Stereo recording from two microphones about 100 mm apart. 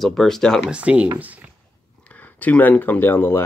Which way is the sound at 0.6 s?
10° right (ahead or behind).